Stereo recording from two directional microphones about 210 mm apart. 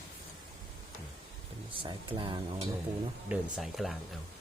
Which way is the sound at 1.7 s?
25° right (ahead or behind).